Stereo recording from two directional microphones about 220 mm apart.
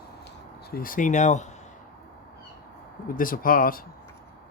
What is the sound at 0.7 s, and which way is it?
Speech, 40° left (ahead or behind).